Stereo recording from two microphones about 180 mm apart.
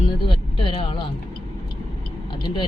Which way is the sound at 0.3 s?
30° left (ahead or behind).